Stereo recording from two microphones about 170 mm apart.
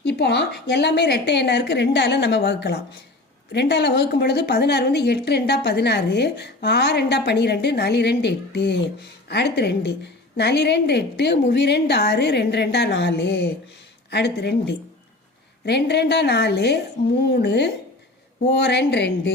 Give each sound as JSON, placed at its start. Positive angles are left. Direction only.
{"t": 0.0, "sound": "a woman's voice", "side_deg": 90}